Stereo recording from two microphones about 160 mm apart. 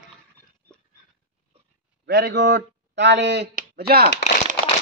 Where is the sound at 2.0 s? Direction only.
90° right.